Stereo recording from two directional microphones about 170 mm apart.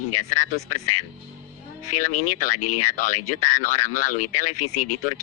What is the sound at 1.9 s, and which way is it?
Speech, 50° left (ahead or behind).